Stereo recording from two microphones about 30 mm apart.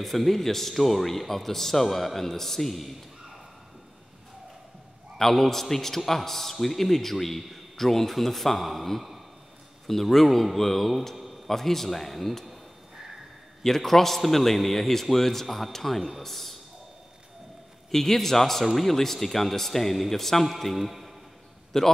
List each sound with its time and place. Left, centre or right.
0.0 s speech: centre
5.1 s a man's voice: centre
13.6 s speech: centre
17.9 s a man's voice: centre
20.8 s a man's voice: centre
21.7 s a man's voice: centre